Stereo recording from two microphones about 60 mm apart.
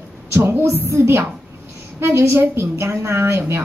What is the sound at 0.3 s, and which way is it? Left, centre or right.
A woman's voice, right.